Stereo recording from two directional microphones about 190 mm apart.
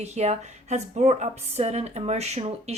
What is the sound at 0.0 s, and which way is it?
A woman's voice, 35° right (ahead or behind).